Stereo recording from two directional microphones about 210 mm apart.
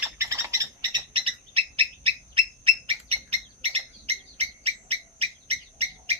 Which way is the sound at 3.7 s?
30° right (ahead or behind).